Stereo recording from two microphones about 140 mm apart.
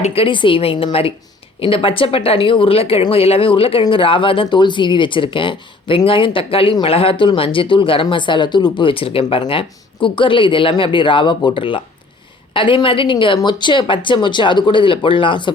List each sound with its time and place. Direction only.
0.0 s speech: 45° left (ahead or behind)